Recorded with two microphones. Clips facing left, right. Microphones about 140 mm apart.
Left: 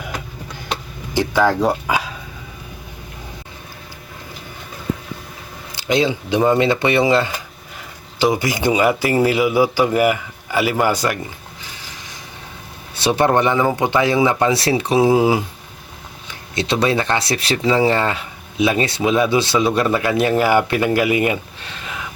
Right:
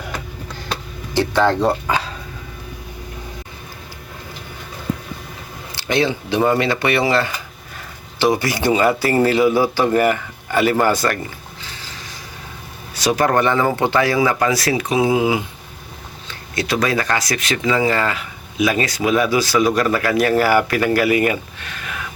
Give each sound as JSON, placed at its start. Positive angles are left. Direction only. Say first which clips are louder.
{"t": 0.7, "sound": "chop", "louder": "left 1 dB", "side_deg": 15}
{"t": 5.7, "sound": "a man's voice", "louder": "left 1 dB", "side_deg": 15}
{"t": 13.0, "sound": "speech", "louder": "left 1 dB", "side_deg": 25}
{"t": 16.6, "sound": "speech", "louder": "left 1 dB", "side_deg": 25}